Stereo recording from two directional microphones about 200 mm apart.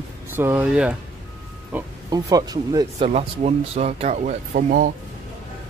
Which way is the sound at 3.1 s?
35° right (ahead or behind).